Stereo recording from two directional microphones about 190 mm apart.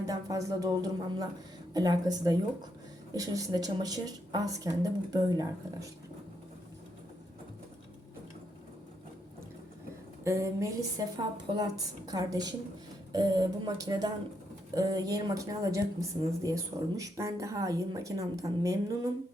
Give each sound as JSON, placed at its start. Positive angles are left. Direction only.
{"t": 0.0, "sound": "a woman's voice", "side_deg": -20}
{"t": 10.2, "sound": "a woman's voice", "side_deg": -15}